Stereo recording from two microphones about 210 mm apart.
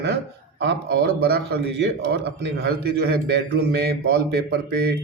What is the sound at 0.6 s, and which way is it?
Speech, 50° right (ahead or behind).